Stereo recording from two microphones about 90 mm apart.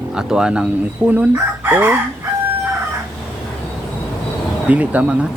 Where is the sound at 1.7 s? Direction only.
20° right (ahead or behind).